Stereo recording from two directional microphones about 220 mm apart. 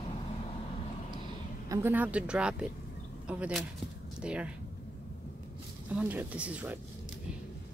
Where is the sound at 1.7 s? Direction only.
10° right (ahead or behind).